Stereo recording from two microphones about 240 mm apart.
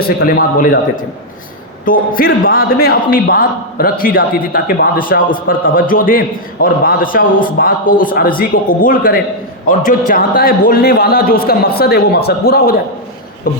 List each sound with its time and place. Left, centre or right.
0.0 s a man's voice: left